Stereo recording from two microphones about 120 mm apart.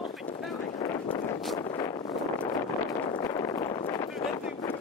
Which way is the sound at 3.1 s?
35° left (ahead or behind).